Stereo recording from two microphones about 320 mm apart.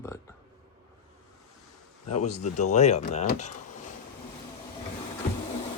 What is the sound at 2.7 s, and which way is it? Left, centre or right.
Speech, left.